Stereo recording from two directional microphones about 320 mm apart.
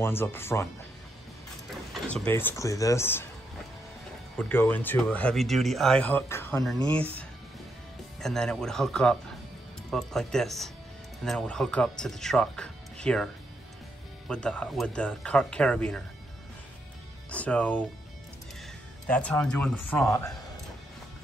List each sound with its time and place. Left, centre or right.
0.0 s speech: centre
2.0 s speech: centre
4.4 s speech: centre
8.2 s speech: centre
17.3 s speech: centre
19.0 s speech: centre